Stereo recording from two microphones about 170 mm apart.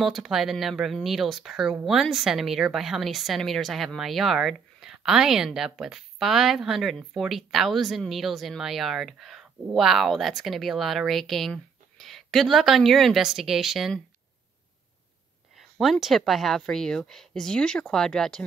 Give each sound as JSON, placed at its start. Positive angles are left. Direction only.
{"t": 0.0, "sound": "speech", "side_deg": 0}
{"t": 15.5, "sound": "speech", "side_deg": 0}